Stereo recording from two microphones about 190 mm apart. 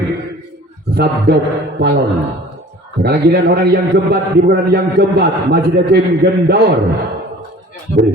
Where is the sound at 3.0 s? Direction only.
60° right (ahead or behind).